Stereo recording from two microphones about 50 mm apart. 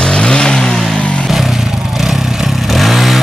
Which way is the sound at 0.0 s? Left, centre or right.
Centre.